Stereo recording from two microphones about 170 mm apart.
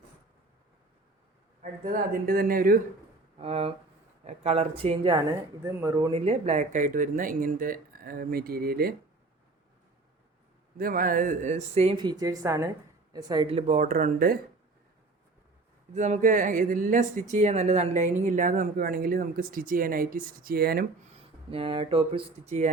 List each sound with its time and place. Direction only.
1.8 s speech: 55° right (ahead or behind)
3.3 s speech: 35° right (ahead or behind)
5.6 s a woman's voice: 20° right (ahead or behind)
6.1 s speech: 40° right (ahead or behind); by 9.0 s 65° right (ahead or behind)
10.8 s speech: 55° right (ahead or behind); by 11.9 s 40° right (ahead or behind)
11.9 s a woman's voice: 25° right (ahead or behind); by 14.3 s 55° right (ahead or behind)
16.0 s speech: 45° right (ahead or behind); by 20.8 s 65° right (ahead or behind)
21.1 s speech: 35° right (ahead or behind)